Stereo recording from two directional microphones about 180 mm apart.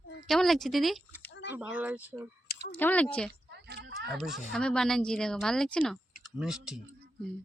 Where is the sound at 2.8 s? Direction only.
10° left (ahead or behind).